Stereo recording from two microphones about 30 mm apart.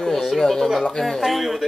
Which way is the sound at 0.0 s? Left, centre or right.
Centre.